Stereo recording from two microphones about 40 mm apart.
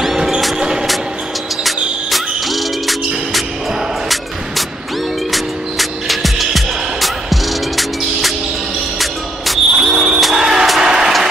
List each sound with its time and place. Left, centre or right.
0.0 s a sound: centre
0.6 s vehicle: centre
1.6 s music: centre
5.3 s music: centre